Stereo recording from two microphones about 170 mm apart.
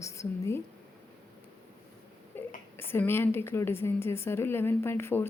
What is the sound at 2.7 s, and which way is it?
A woman's voice, 15° left (ahead or behind).